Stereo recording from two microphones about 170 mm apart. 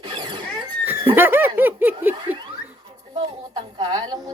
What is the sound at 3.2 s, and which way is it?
A woman's voice, 25° right (ahead or behind).